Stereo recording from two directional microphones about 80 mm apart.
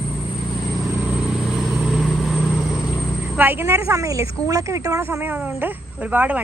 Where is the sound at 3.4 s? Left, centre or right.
Right.